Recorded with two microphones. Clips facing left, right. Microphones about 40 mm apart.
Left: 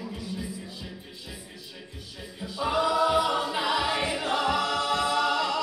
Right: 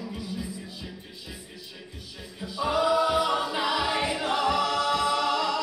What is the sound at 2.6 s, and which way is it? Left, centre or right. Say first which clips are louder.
A capella: right 1 dB; centre.